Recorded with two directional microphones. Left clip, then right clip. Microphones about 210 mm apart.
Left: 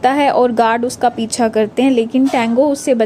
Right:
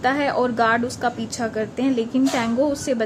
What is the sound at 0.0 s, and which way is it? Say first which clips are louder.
A woman's voice: left 8 dB; 30° left (ahead or behind).